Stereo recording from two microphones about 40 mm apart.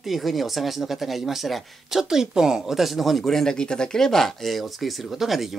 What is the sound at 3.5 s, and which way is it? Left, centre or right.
Speech, left.